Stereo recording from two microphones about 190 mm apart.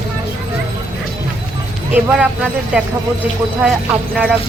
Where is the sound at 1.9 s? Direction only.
5° right (ahead or behind).